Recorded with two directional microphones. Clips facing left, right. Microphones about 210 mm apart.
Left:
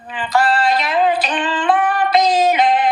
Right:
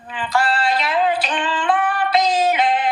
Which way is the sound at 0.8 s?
20° left (ahead or behind).